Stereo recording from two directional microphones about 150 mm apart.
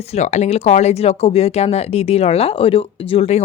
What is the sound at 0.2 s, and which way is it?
Speech, 50° left (ahead or behind).